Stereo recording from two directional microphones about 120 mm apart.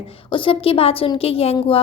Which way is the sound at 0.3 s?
45° left (ahead or behind).